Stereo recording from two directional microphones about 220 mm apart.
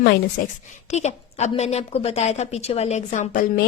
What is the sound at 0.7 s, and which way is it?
A woman's voice, 30° left (ahead or behind).